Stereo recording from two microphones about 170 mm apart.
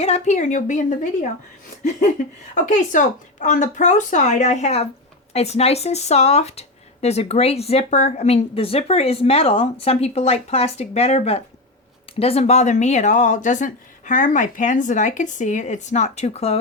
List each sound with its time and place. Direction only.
0.0 s speech: 40° left (ahead or behind)
2.6 s speech: 50° left (ahead or behind)